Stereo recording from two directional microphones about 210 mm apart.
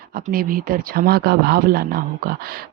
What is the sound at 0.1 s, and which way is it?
Speech, 45° right (ahead or behind).